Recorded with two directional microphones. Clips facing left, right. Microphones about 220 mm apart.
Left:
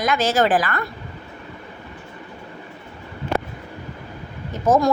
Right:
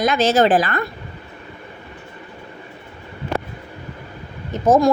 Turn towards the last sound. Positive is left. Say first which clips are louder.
# right 3 dB
turn(degrees=-20)  # may be behind; listen again after turning